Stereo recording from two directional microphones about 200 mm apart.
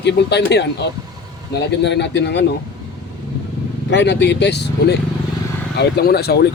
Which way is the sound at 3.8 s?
60° left (ahead or behind).